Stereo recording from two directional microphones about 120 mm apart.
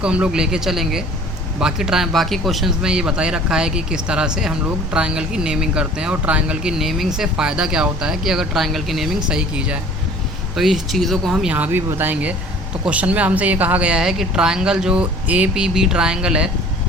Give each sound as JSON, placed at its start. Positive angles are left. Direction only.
{"t": 0.0, "sound": "speech", "side_deg": -10}
{"t": 11.5, "sound": "speech", "side_deg": -15}